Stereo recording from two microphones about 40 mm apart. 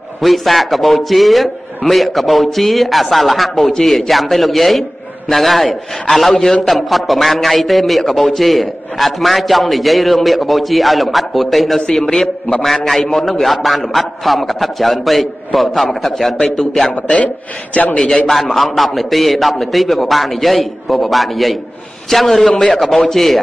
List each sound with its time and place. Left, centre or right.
0.2 s a man's voice: centre
11.9 s a man's voice: centre
16.9 s a man's voice: left
17.9 s a man's voice: centre
18.3 s a man's voice: centre